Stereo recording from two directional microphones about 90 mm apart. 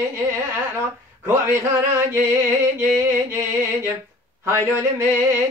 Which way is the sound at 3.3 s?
30° right (ahead or behind).